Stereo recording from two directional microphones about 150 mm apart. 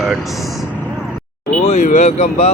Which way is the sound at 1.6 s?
50° left (ahead or behind).